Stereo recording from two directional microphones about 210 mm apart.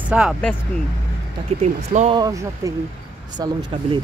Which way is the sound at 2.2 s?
15° right (ahead or behind).